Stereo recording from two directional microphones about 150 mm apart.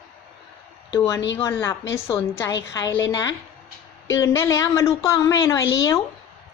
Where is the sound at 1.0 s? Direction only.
20° left (ahead or behind).